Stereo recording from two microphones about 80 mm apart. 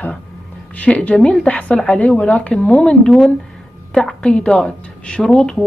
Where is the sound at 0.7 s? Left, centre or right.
Centre.